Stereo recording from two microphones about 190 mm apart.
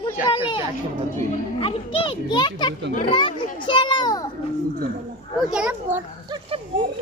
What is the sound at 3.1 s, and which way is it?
Children playing, 25° left (ahead or behind).